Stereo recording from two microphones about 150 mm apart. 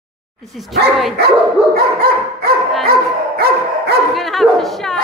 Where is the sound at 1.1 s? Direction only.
90° right.